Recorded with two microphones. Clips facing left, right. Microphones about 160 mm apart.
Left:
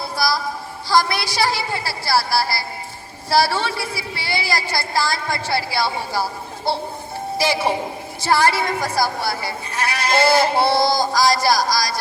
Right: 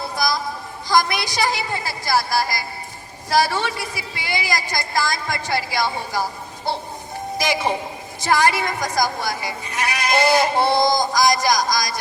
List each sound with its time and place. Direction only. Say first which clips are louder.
0.2 s a sound: left 1 dB; 20° right (ahead or behind)
0.9 s speech: left 1 dB; 20° right (ahead or behind)
7.3 s a man's voice: left 2 dB; 15° right (ahead or behind)